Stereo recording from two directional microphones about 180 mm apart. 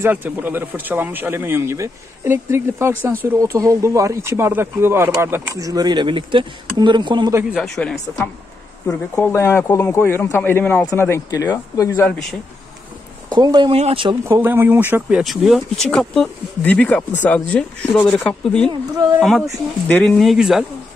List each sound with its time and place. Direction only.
0.0 s speech: 10° right (ahead or behind)
7.6 s speech: 5° left (ahead or behind)
8.8 s speech: 15° left (ahead or behind)
13.3 s speech: 25° right (ahead or behind)
14.2 s speech: 15° right (ahead or behind)